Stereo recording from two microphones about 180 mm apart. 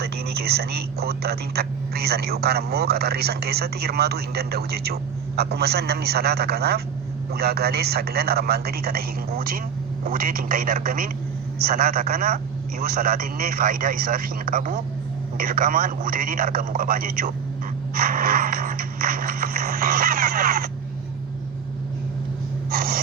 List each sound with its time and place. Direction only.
0.0 s speech: 60° right (ahead or behind)
22.7 s speech: 55° right (ahead or behind)